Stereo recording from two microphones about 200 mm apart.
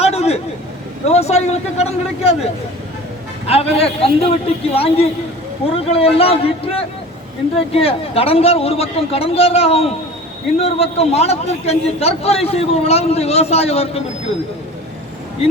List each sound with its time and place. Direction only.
0.0 s a sound: 30° left (ahead or behind)
1.0 s a man's voice: 30° left (ahead or behind)
15.4 s a man's voice: 30° left (ahead or behind)